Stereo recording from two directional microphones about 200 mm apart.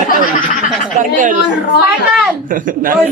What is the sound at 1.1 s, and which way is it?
Speech, 40° right (ahead or behind).